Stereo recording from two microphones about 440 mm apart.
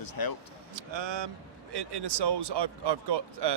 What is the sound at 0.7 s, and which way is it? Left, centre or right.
Speech, right.